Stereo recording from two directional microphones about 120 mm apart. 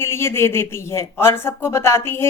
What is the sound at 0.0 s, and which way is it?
Speech, 20° left (ahead or behind).